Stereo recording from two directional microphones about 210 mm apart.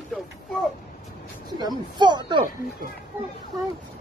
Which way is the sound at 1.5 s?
20° right (ahead or behind).